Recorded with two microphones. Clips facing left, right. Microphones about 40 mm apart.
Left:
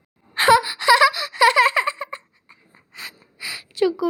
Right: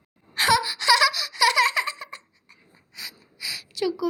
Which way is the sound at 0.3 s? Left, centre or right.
Left.